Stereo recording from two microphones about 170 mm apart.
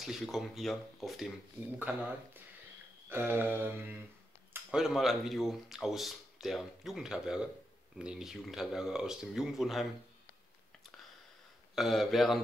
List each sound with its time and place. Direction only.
0.0 s speech: centre (ahead or behind)
1.8 s mantra: 10° right (ahead or behind)
4.6 s speech: 5° right (ahead or behind)
11.7 s speech: centre (ahead or behind)